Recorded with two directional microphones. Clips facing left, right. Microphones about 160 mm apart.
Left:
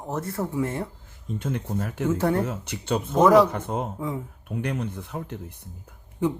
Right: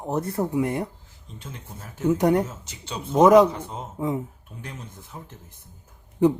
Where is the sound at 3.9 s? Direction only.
20° right (ahead or behind).